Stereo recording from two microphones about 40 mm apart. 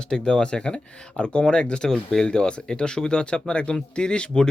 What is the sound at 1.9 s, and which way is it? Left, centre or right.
Speech, centre.